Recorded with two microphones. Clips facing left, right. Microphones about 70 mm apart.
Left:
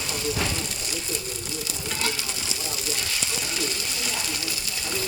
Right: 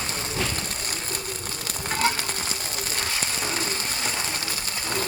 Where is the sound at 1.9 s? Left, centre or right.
Right.